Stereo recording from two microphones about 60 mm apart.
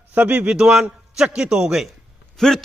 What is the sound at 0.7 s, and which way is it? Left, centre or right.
A man's voice, centre.